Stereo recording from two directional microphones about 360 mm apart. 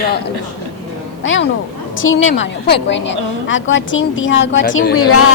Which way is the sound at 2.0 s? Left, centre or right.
Left.